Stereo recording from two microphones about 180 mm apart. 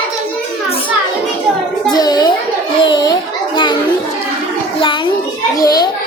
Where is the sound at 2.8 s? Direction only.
25° left (ahead or behind).